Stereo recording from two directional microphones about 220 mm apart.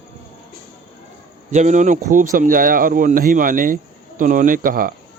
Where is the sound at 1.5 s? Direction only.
35° right (ahead or behind).